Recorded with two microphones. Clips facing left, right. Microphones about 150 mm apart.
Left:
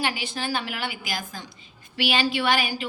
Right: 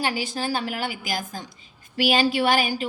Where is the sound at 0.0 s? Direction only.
40° right (ahead or behind).